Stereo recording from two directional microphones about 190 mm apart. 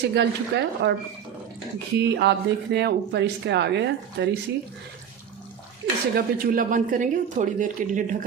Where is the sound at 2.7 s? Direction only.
65° right (ahead or behind).